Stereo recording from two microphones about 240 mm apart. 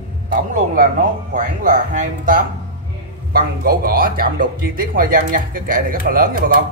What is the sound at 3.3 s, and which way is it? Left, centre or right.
Speech, right.